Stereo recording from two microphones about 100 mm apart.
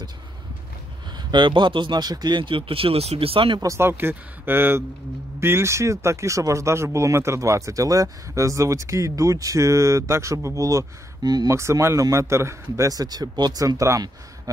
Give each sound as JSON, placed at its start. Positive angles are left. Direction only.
{"t": 1.3, "sound": "speech", "side_deg": -50}
{"t": 3.6, "sound": "speech", "side_deg": -25}